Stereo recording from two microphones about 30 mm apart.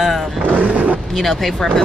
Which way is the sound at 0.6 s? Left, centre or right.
Right.